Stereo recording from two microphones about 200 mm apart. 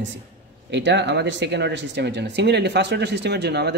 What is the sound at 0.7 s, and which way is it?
Speech, 60° right (ahead or behind).